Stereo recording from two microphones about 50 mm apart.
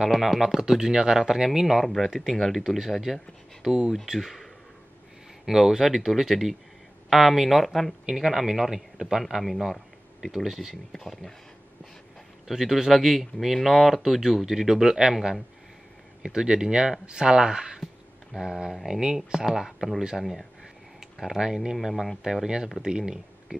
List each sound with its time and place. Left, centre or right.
0.0 s speech: centre
8.0 s speech: centre
12.4 s speech: centre
18.7 s speech: centre
18.9 s speech: centre
21.7 s speech: centre